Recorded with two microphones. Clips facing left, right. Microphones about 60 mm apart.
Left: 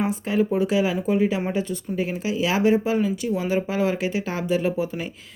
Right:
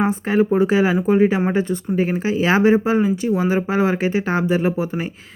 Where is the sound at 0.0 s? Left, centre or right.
Right.